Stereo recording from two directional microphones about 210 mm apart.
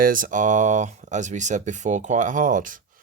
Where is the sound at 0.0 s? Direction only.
40° right (ahead or behind).